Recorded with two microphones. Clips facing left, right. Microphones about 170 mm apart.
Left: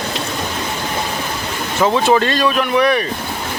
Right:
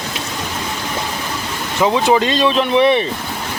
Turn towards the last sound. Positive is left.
turn(degrees=-25)  # may be behind; listen again after turning